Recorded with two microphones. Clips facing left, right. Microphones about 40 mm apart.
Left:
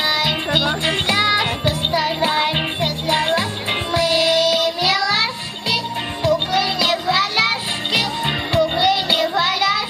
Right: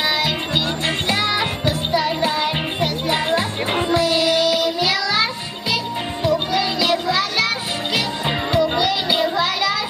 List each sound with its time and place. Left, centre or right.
1.1 s music: centre; by 2.9 s left
4.0 s music: left
4.7 s child singing: centre
6.3 s music: centre
6.8 s music: centre
7.2 s music: left